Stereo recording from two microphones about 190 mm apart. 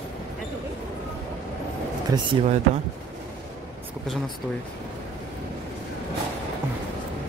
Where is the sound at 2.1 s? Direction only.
20° right (ahead or behind).